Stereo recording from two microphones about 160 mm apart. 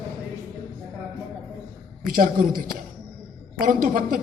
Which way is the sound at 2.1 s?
60° right (ahead or behind).